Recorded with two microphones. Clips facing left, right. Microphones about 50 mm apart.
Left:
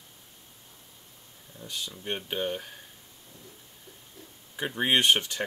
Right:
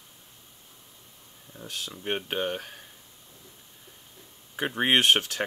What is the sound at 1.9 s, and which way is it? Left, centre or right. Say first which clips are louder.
Speech: right 4 dB; centre.